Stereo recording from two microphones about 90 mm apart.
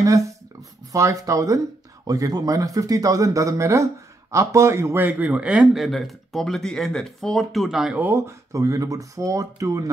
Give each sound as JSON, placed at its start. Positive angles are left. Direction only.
{"t": 0.9, "sound": "speech", "side_deg": -35}
{"t": 5.8, "sound": "speech", "side_deg": 0}
{"t": 8.0, "sound": "speech", "side_deg": -25}
{"t": 8.5, "sound": "speech", "side_deg": -40}